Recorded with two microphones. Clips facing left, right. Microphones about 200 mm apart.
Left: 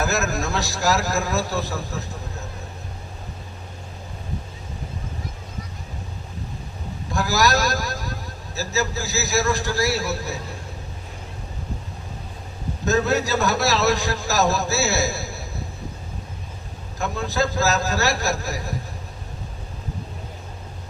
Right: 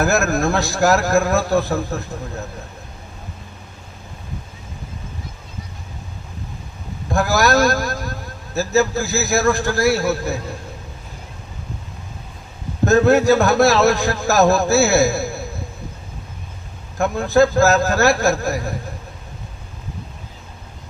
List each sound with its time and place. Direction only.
0.0 s a man's voice: 55° right (ahead or behind)
7.1 s a man's voice: 55° right (ahead or behind)
12.8 s a man's voice: 55° right (ahead or behind)
17.0 s a man's voice: 55° right (ahead or behind)